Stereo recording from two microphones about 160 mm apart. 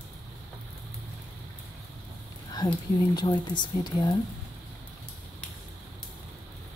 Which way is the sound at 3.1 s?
25° left (ahead or behind).